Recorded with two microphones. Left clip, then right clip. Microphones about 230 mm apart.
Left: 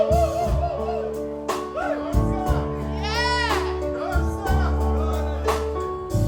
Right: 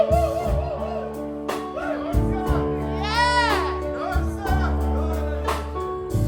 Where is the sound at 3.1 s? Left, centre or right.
Centre.